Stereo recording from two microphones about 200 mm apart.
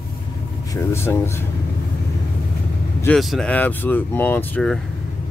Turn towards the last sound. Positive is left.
turn(degrees=5)  # may be behind; listen again after turning